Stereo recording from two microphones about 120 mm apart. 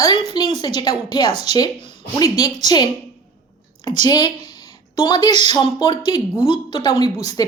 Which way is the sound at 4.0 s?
35° left (ahead or behind).